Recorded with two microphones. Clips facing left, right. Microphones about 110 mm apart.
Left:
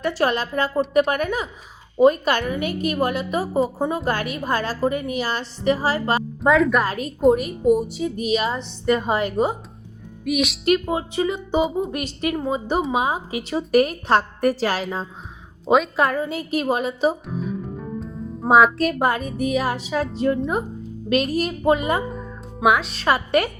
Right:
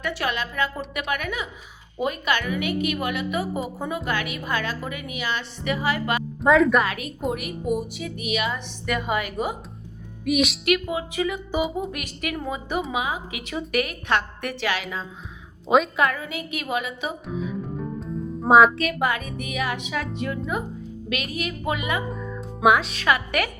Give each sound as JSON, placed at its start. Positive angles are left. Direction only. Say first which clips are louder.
{"t": 0.0, "sound": "a woman's voice", "louder": "left 6 dB", "side_deg": 35}
{"t": 6.4, "sound": "a woman's voice", "louder": "even", "side_deg": 0}
{"t": 6.8, "sound": "a woman's voice", "louder": "left 9 dB", "side_deg": 35}
{"t": 10.2, "sound": "a woman's voice", "louder": "even", "side_deg": 0}
{"t": 10.7, "sound": "a woman's voice", "louder": "left 3 dB", "side_deg": 30}
{"t": 17.4, "sound": "music", "louder": "even", "side_deg": 0}
{"t": 18.9, "sound": "a woman's voice", "louder": "left 4 dB", "side_deg": 35}
{"t": 22.6, "sound": "a woman's voice", "louder": "even", "side_deg": 0}
{"t": 23.0, "sound": "a woman's voice", "louder": "left 5 dB", "side_deg": 30}